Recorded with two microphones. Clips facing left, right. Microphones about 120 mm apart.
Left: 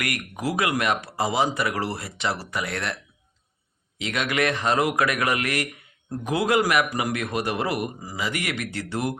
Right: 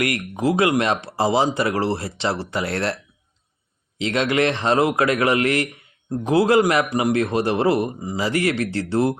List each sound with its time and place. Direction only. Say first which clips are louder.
0.0 s a man's voice: right 7 dB; 25° right (ahead or behind)